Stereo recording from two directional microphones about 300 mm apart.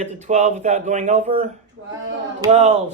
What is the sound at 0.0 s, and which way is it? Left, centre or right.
Speech, right.